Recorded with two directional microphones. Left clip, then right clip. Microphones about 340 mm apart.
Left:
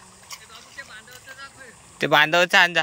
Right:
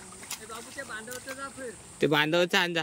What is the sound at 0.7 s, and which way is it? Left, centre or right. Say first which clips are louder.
Snake: right 1 dB; right.